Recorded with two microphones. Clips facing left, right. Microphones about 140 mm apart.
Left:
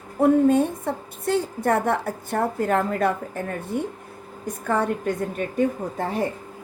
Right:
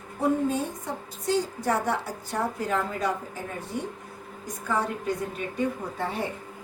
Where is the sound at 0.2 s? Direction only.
60° left (ahead or behind); by 6.2 s 45° left (ahead or behind).